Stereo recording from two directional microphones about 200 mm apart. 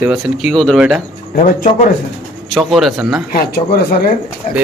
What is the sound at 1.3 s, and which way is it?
Speech, 40° left (ahead or behind).